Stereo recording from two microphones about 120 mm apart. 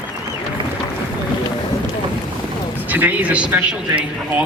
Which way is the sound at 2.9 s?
15° right (ahead or behind).